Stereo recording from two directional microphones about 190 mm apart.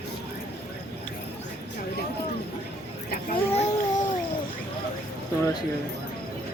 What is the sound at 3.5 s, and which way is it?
Babbling, 40° left (ahead or behind).